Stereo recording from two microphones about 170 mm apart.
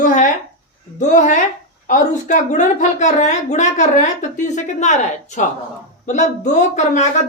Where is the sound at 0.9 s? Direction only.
45° left (ahead or behind).